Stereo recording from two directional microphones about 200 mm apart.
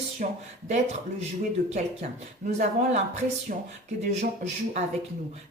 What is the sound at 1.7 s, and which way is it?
Speech, 35° right (ahead or behind).